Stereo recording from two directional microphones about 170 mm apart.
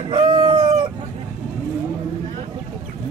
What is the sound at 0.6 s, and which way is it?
Chicken, 40° right (ahead or behind).